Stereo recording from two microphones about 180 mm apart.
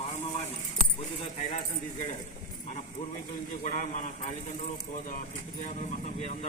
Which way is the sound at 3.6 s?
45° left (ahead or behind).